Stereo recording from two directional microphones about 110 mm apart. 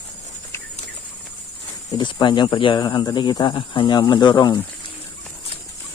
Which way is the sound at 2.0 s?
45° left (ahead or behind).